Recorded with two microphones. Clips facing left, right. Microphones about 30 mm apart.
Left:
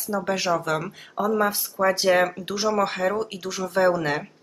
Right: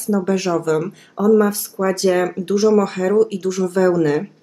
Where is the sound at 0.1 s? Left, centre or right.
Centre.